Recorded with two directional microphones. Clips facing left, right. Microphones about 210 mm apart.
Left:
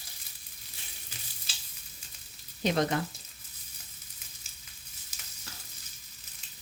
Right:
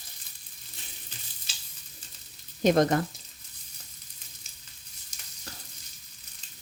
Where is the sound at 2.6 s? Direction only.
45° right (ahead or behind).